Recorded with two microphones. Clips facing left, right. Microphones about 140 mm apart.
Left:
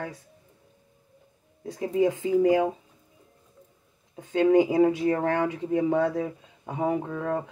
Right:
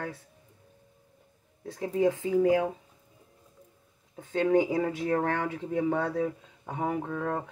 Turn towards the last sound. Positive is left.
turn(degrees=20)  # may be behind; listen again after turning